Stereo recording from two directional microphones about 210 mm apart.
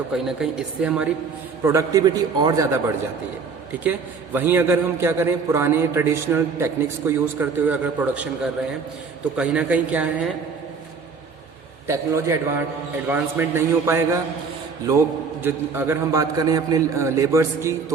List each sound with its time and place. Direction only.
0.1 s speech: 5° right (ahead or behind)
1.6 s a man's voice: 15° right (ahead or behind)
3.8 s a man's voice: 10° right (ahead or behind)
9.3 s a man's voice: 5° right (ahead or behind)
11.9 s a man's voice: 15° right (ahead or behind)